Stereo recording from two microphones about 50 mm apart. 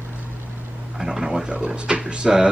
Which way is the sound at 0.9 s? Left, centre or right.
Centre.